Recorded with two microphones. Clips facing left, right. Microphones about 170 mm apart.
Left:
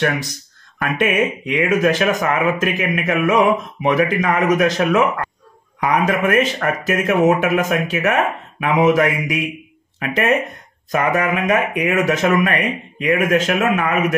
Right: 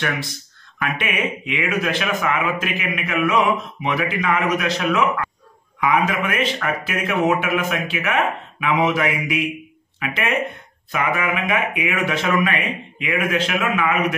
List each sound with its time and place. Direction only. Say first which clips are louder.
0.7 s speech: left 7 dB; 40° left (ahead or behind)